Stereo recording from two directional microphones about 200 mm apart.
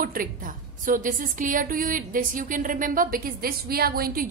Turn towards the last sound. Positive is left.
turn(degrees=-45)  # may be behind; listen again after turning